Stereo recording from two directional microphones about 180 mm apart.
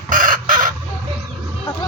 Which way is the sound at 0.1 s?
45° right (ahead or behind).